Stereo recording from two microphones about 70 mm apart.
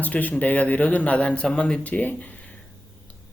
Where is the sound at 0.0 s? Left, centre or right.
Left.